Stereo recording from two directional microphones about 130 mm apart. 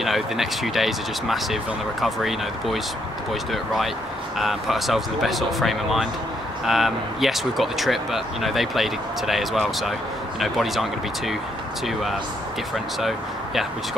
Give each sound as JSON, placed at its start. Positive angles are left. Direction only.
{"t": 0.0, "sound": "speech", "side_deg": 0}
{"t": 4.4, "sound": "speech", "side_deg": 0}